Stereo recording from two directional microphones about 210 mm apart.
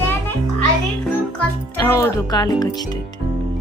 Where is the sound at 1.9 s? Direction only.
15° left (ahead or behind).